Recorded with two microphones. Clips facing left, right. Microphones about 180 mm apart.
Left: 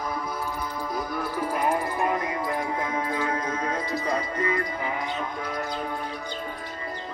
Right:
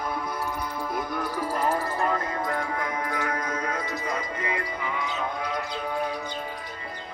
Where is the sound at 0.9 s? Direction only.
Centre (ahead or behind); by 5.6 s 50° left (ahead or behind).